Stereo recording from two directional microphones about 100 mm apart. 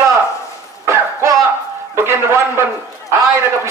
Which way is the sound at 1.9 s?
25° right (ahead or behind).